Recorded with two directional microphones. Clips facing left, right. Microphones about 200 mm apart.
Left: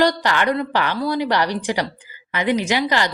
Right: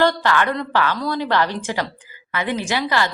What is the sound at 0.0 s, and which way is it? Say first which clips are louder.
A woman's voice: even; 15° left (ahead or behind).